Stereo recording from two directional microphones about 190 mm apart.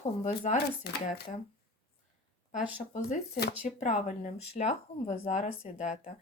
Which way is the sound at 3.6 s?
40° left (ahead or behind).